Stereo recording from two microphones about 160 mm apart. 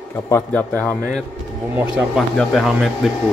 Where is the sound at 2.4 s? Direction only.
Centre (ahead or behind).